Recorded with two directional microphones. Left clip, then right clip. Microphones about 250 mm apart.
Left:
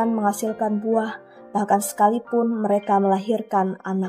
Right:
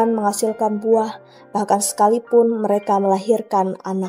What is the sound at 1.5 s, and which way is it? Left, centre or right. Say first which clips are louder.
Speech: right 2 dB; right.